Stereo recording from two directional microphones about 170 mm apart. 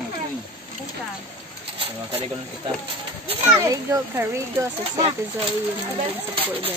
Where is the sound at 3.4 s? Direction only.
15° right (ahead or behind).